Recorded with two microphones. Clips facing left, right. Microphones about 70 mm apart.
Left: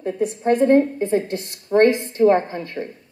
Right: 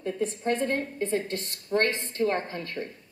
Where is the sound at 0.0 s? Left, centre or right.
Centre.